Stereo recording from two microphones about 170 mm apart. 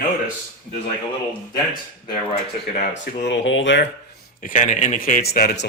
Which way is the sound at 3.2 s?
90° left.